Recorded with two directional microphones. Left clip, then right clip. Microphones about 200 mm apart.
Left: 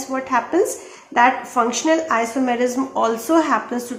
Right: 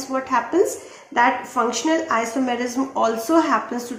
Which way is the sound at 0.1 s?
20° left (ahead or behind).